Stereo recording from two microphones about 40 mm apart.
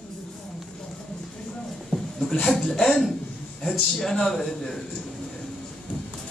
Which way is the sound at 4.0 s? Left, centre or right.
Centre.